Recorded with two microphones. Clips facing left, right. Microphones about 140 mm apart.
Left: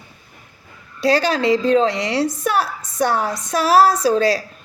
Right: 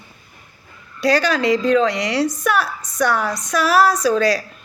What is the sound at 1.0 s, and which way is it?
A woman's voice, 30° left (ahead or behind).